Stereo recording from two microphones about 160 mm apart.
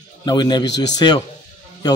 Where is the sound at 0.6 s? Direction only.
90° left.